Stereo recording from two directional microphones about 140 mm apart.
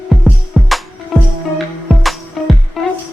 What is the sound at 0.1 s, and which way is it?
Music, centre (ahead or behind).